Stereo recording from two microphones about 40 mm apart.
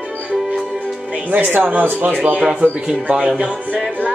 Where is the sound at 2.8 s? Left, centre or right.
Centre.